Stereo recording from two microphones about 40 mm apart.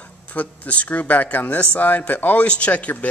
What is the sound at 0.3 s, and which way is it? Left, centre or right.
Speech, left.